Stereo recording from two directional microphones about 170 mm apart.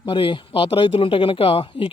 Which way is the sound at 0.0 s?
30° left (ahead or behind).